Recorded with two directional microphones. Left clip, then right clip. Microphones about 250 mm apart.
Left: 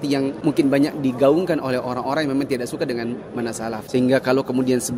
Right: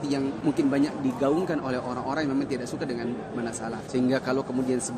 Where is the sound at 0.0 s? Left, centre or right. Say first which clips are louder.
Left 6 dB; left.